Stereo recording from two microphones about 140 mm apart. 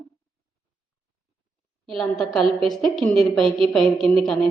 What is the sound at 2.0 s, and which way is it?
A woman's voice, centre (ahead or behind).